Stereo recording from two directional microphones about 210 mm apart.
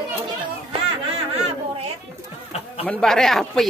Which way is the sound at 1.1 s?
30° right (ahead or behind).